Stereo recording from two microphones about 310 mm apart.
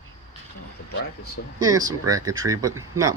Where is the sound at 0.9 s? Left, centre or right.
Left.